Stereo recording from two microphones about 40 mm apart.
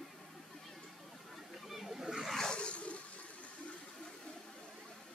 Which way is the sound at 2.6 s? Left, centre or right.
Left.